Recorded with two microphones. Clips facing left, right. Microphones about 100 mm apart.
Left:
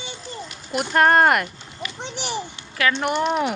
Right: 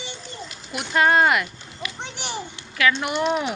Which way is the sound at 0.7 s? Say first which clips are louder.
Left 2 dB; 50° left (ahead or behind).